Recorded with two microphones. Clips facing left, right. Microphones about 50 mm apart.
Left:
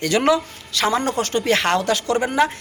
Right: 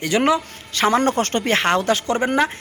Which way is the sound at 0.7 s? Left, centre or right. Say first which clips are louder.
Right 3 dB; right.